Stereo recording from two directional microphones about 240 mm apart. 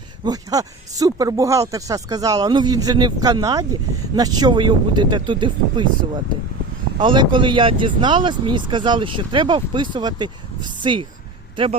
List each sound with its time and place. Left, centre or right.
0.3 s speech: centre
7.0 s speech: centre